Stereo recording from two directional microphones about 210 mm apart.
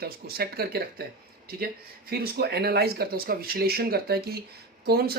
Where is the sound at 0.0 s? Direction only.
45° right (ahead or behind).